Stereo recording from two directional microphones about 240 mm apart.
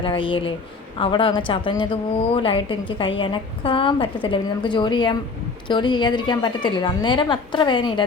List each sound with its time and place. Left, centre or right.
0.0 s a woman's voice: left